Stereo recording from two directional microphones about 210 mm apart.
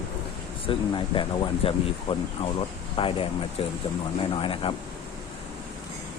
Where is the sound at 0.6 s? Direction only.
25° left (ahead or behind).